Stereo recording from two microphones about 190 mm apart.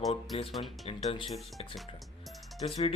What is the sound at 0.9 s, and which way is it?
Speech, 30° left (ahead or behind).